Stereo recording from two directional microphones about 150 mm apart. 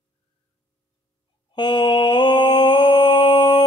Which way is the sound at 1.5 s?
30° left (ahead or behind).